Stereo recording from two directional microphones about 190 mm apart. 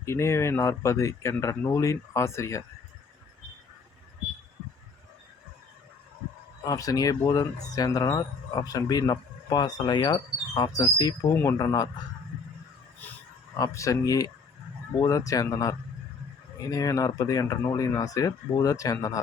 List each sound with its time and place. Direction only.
0.0 s speech: 15° left (ahead or behind)
6.7 s speech: 20° left (ahead or behind)
13.5 s speech: 15° left (ahead or behind)